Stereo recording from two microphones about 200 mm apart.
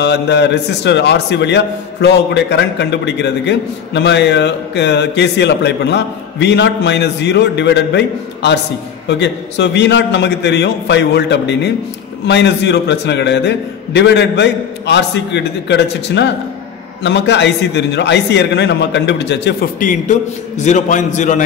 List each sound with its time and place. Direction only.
0.0 s a man's voice: 55° left (ahead or behind); by 21.5 s 40° left (ahead or behind)